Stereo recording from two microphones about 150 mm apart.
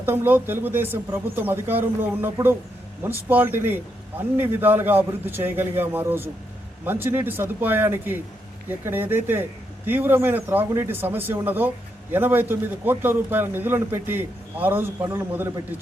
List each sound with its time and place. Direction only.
0.0 s speech: 15° right (ahead or behind)